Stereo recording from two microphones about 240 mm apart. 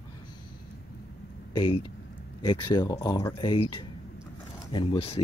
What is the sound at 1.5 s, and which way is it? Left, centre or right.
Speech, centre.